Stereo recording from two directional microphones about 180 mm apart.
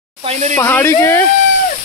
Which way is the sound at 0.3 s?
40° right (ahead or behind).